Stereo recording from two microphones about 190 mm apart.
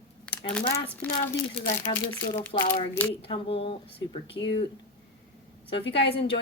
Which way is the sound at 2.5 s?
35° left (ahead or behind).